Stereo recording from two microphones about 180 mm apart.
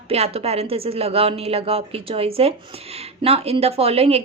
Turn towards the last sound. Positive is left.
turn(degrees=-35)  # may be behind; listen again after turning